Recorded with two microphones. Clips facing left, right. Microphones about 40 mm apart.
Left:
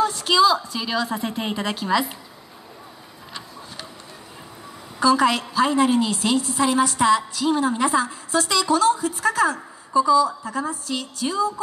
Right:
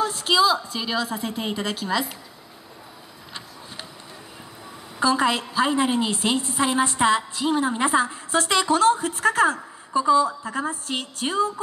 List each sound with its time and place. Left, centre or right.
0.1 s a woman's voice: centre
0.4 s a woman's voice: centre
1.0 s a woman's voice: centre
5.2 s a woman's voice: centre; by 11.6 s right